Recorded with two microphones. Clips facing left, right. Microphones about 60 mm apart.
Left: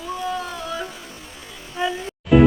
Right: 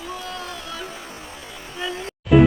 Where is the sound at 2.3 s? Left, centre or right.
Centre.